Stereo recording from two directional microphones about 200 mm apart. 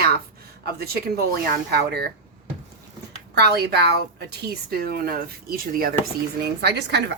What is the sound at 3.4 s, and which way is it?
Speech, 55° right (ahead or behind).